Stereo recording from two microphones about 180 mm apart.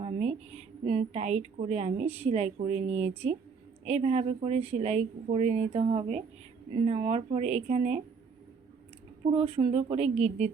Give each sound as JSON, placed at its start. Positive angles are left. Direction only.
{"t": 0.0, "sound": "a woman's voice", "side_deg": -35}
{"t": 9.3, "sound": "a woman's voice", "side_deg": -30}